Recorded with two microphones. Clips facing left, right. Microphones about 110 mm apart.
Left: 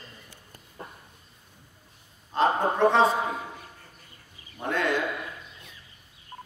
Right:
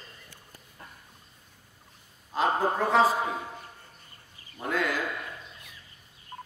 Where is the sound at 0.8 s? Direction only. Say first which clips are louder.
Left 7 dB; 30° left (ahead or behind).